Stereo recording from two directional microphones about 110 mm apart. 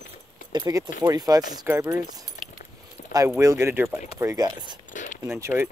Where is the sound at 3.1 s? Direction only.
30° right (ahead or behind).